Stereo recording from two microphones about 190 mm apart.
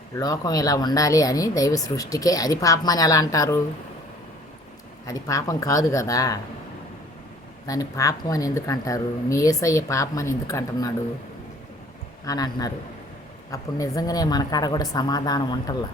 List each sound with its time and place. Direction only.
0.2 s speech: 20° left (ahead or behind)
5.0 s speech: 15° left (ahead or behind)
7.7 s speech: 20° left (ahead or behind)
12.2 s a woman's voice: 20° left (ahead or behind)